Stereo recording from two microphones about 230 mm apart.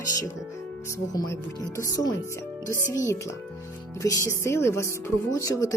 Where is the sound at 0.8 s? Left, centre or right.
Centre.